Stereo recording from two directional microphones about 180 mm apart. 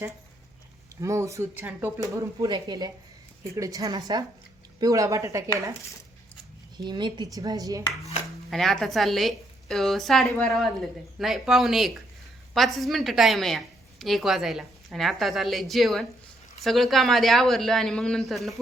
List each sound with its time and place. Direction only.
1.0 s a woman's voice: 15° right (ahead or behind)
6.7 s a woman's voice: 25° right (ahead or behind)
8.4 s a woman's voice: centre (ahead or behind)